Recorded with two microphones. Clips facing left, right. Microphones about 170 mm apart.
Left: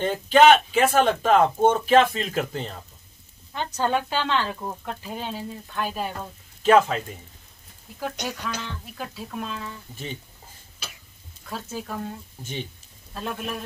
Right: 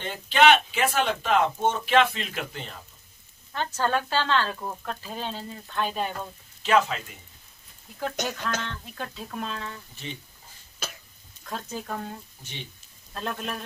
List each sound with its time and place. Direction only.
0.0 s speech: 45° left (ahead or behind)
3.5 s speech: 15° left (ahead or behind)
6.6 s speech: 45° left (ahead or behind)
8.2 s speech: 50° right (ahead or behind)
8.5 s speech: 5° left (ahead or behind)
11.4 s speech: 5° left (ahead or behind)